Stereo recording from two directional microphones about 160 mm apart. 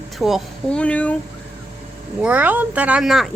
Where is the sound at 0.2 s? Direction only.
Centre (ahead or behind).